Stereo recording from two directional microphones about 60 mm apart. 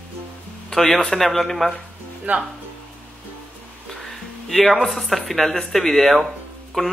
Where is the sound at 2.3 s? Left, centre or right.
Right.